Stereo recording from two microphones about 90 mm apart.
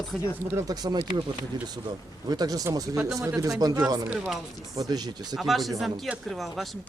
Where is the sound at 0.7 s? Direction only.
50° right (ahead or behind).